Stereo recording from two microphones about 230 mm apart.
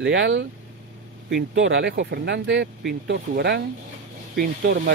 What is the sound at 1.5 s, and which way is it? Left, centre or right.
Speech, right.